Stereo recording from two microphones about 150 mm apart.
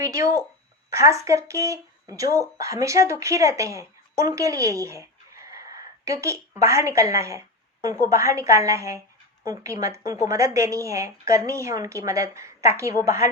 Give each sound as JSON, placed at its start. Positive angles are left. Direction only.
{"t": 0.0, "sound": "a woman's voice", "side_deg": -20}